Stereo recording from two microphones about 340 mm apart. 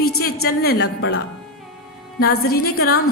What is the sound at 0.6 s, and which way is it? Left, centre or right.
Speech, left.